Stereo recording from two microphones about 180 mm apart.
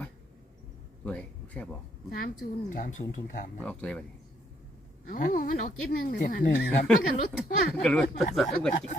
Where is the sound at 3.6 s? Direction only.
5° left (ahead or behind).